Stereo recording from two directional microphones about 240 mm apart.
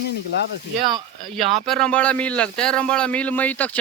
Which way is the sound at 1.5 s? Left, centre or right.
Centre.